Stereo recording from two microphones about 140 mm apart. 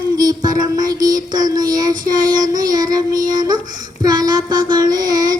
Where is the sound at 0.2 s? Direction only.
25° right (ahead or behind).